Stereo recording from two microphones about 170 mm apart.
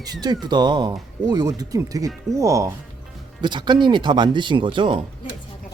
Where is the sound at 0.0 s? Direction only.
25° right (ahead or behind).